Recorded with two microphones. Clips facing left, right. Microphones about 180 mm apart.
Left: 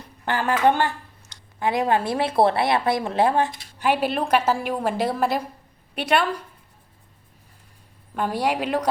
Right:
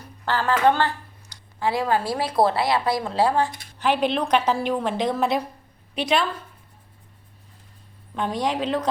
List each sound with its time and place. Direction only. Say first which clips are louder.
0.3 s speech: even; 15° left (ahead or behind)
3.8 s a woman's voice: even; 10° left (ahead or behind)
8.1 s a woman's voice: left 1 dB; 5° left (ahead or behind)